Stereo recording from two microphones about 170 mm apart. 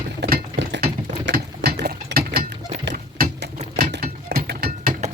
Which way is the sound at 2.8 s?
85° right.